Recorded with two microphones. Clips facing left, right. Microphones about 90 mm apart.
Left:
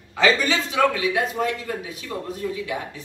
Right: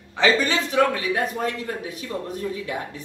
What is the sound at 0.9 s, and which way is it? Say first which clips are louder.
A woman's voice: left 1 dB; 40° right (ahead or behind).